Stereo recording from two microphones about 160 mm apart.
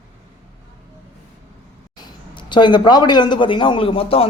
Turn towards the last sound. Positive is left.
turn(degrees=35)  # may be behind; listen again after turning